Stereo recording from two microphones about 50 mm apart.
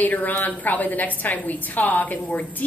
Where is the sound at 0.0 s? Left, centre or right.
Left.